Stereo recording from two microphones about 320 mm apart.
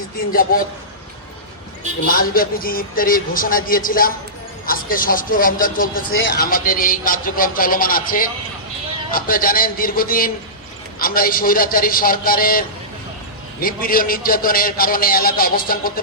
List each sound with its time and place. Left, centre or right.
0.5 s a man's voice: left
2.1 s a man's voice: left